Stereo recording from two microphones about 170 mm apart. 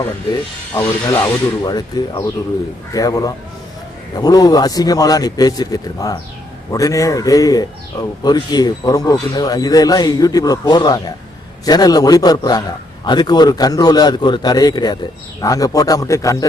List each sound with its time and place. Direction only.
1.0 s a man's voice: 25° left (ahead or behind)